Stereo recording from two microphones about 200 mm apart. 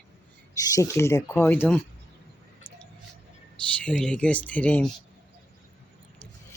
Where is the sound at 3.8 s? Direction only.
5° left (ahead or behind).